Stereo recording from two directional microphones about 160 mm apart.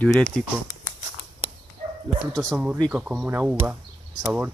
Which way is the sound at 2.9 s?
5° right (ahead or behind).